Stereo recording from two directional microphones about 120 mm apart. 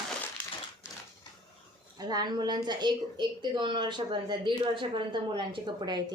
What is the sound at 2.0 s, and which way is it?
A woman's voice, 35° right (ahead or behind).